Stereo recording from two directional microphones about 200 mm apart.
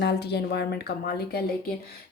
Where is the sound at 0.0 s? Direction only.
55° left (ahead or behind).